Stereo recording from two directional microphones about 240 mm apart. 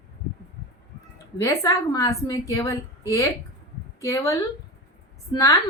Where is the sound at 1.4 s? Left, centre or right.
Centre.